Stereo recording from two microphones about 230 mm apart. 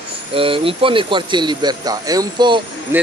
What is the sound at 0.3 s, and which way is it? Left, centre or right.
Speech, right.